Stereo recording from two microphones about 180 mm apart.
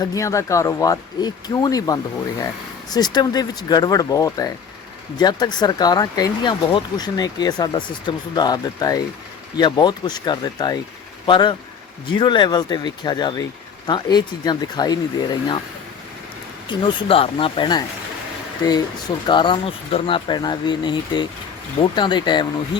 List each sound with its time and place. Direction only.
0.0 s speech: 20° left (ahead or behind)
16.6 s speech: 30° left (ahead or behind)